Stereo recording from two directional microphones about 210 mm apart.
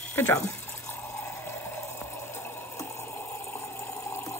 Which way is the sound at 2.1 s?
10° left (ahead or behind).